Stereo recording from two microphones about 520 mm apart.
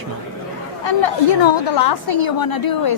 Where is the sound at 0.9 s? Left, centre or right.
Left.